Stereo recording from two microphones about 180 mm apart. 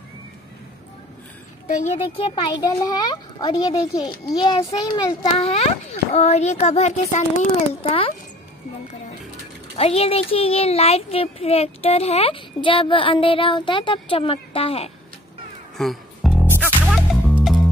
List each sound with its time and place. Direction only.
1.7 s a child's voice: 40° left (ahead or behind)
9.8 s a child's voice: 35° left (ahead or behind)
15.8 s music: centre (ahead or behind)